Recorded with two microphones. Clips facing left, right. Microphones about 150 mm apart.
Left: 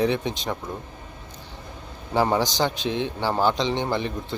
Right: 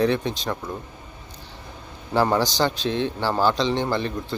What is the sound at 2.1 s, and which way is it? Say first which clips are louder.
A man's voice: right 1 dB; 20° left (ahead or behind).